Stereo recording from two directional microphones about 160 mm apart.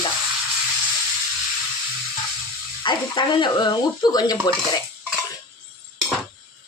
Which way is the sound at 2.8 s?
30° left (ahead or behind).